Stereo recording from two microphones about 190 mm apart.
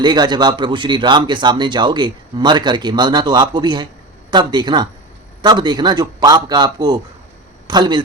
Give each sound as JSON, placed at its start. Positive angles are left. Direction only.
{"t": 0.0, "sound": "a man's voice", "side_deg": -25}